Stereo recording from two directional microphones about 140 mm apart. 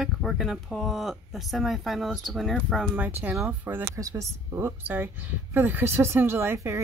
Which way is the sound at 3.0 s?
15° right (ahead or behind).